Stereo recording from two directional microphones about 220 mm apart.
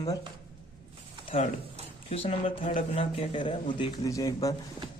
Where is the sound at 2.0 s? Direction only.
25° left (ahead or behind).